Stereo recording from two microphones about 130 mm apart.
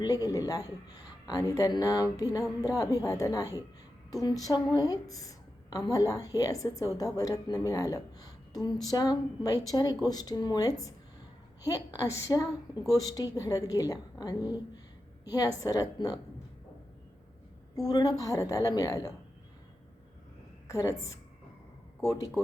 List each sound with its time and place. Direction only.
0.0 s a woman's voice: 30° left (ahead or behind)
17.8 s a woman's voice: 30° left (ahead or behind)
20.7 s a woman's voice: 25° left (ahead or behind)